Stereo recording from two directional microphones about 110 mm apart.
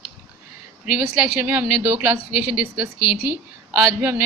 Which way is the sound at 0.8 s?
10° right (ahead or behind).